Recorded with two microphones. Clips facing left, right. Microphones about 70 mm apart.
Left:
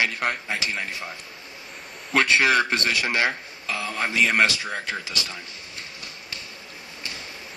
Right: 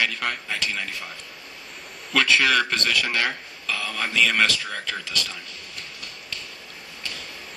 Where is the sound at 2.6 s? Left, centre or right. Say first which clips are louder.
Left 1 dB; left.